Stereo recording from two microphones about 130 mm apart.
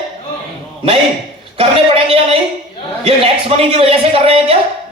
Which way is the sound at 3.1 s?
50° right (ahead or behind).